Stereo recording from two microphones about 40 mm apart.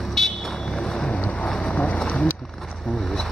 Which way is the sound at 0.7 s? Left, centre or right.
Centre.